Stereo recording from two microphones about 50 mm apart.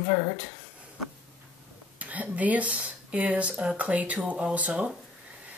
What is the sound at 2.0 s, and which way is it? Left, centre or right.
Speech, right.